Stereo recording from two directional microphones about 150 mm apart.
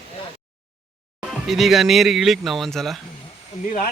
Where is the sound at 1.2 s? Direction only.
Centre (ahead or behind).